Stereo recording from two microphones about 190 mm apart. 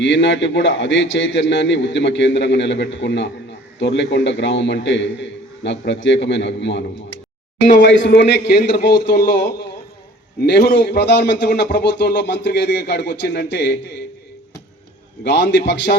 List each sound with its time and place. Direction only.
0.0 s a man's voice: 75° left (ahead or behind)
15.2 s a man's voice: 65° left (ahead or behind)